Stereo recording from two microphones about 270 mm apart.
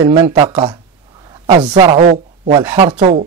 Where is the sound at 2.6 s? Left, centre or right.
Centre.